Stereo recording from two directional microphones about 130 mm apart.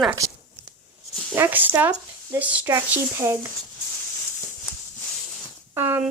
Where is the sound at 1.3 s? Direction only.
15° right (ahead or behind).